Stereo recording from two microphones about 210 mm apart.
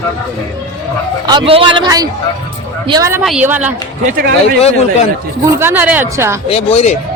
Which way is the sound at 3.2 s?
5° right (ahead or behind).